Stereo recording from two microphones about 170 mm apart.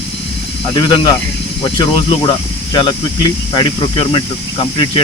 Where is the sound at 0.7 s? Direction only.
30° left (ahead or behind).